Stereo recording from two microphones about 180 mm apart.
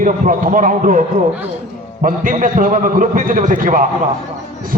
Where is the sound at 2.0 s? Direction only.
45° right (ahead or behind).